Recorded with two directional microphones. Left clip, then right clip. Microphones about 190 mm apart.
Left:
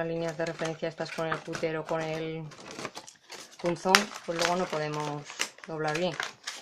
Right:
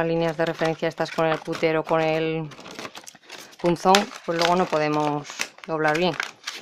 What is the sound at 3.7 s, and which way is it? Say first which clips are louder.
Speech: right 6 dB; 45° right (ahead or behind).